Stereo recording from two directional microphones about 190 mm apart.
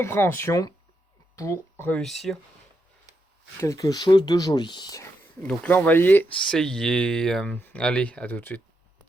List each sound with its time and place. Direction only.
0.0 s speech: 15° left (ahead or behind)
3.6 s speech: 15° left (ahead or behind)
5.4 s speech: 5° left (ahead or behind)